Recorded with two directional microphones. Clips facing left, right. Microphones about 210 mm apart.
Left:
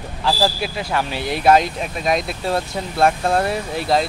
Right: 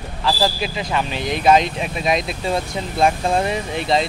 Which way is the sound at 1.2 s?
20° right (ahead or behind).